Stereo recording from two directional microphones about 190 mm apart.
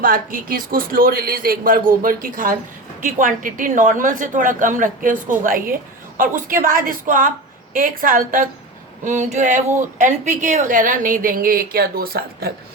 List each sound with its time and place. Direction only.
0.0 s speech: 45° right (ahead or behind)
9.0 s a sound: 40° right (ahead or behind)
10.0 s speech: 40° right (ahead or behind)